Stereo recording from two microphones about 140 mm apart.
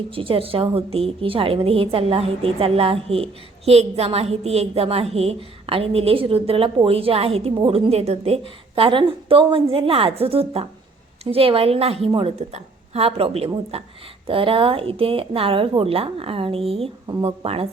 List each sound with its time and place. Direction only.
0.1 s a woman's voice: 40° right (ahead or behind)
7.9 s a woman's voice: 50° right (ahead or behind)